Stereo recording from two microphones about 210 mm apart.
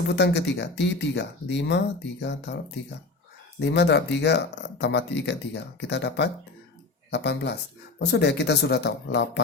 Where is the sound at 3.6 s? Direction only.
55° left (ahead or behind).